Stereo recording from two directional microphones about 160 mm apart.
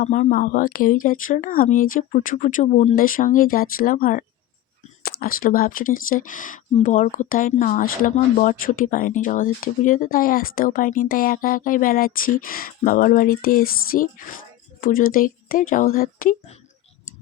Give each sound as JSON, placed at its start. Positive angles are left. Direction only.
{"t": 0.0, "sound": "speech", "side_deg": 50}